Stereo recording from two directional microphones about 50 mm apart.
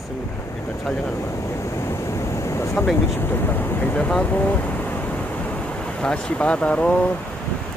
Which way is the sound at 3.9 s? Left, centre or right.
Left.